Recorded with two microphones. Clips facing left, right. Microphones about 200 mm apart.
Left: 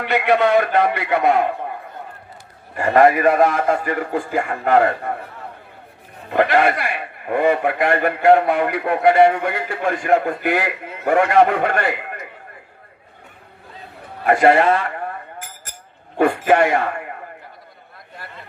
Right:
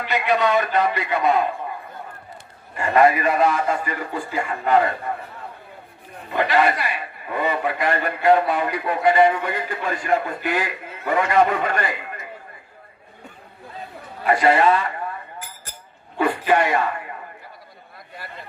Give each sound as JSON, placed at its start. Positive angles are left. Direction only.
{"t": 0.0, "sound": "a man's voice", "side_deg": 60}
{"t": 2.7, "sound": "a man's voice", "side_deg": 50}
{"t": 6.3, "sound": "a man's voice", "side_deg": 55}
{"t": 14.3, "sound": "a man's voice", "side_deg": 55}